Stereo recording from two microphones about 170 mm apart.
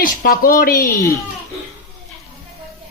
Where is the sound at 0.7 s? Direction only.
20° left (ahead or behind).